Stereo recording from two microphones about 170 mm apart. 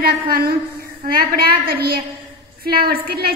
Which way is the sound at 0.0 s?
60° right (ahead or behind).